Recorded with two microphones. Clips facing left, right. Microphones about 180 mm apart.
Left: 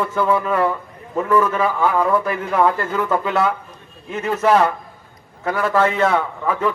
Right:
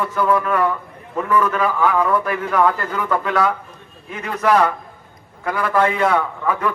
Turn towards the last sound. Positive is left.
turn(degrees=25)  # may be behind; listen again after turning